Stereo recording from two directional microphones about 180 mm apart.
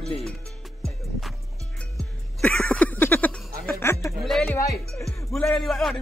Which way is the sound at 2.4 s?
5° left (ahead or behind).